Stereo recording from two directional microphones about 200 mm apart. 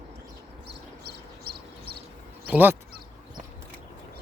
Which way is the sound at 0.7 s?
55° right (ahead or behind).